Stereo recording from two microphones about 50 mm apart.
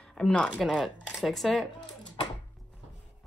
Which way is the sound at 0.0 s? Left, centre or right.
Centre.